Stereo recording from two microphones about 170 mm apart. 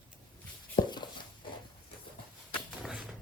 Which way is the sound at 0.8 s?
25° left (ahead or behind).